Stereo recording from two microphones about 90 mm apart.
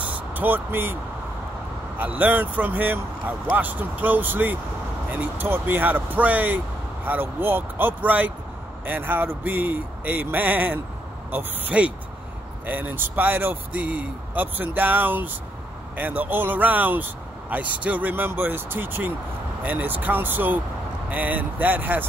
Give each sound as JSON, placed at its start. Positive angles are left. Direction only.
{"t": 0.0, "sound": "vehicle", "side_deg": -20}
{"t": 2.0, "sound": "speech", "side_deg": -20}